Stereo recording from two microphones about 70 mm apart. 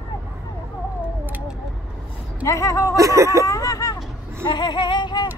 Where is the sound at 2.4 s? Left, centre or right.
Left.